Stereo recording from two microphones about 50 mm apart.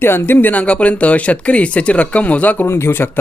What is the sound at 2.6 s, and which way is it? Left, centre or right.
Speech, left.